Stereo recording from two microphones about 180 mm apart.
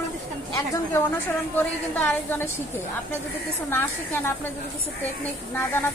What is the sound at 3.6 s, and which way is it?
Speech, 10° left (ahead or behind).